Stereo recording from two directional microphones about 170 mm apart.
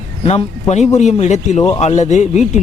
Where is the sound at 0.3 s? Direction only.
40° left (ahead or behind).